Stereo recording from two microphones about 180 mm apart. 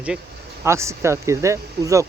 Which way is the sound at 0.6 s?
15° right (ahead or behind).